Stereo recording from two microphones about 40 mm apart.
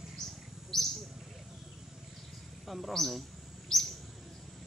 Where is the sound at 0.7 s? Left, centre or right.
Centre.